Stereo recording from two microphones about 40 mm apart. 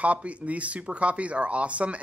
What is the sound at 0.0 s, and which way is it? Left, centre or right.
Speech, right.